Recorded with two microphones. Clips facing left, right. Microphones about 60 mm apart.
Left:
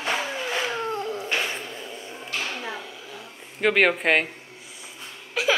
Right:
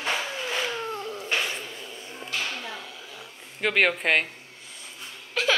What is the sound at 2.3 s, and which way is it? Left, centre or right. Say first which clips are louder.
Music: left 2 dB; centre.